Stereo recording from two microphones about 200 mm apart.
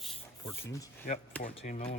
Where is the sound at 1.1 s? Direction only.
45° left (ahead or behind).